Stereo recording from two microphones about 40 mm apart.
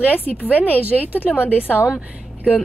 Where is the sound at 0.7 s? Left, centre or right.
Right.